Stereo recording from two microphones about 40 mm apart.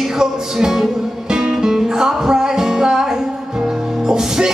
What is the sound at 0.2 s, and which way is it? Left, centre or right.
Speech, centre.